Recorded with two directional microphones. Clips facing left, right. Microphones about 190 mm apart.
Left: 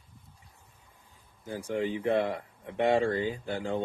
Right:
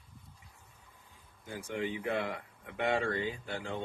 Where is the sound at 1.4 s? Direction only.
35° left (ahead or behind).